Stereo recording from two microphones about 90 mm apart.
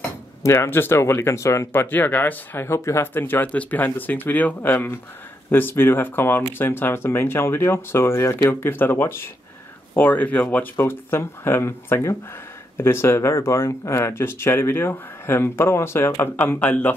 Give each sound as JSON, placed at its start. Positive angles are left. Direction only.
{"t": 0.4, "sound": "speech", "side_deg": 30}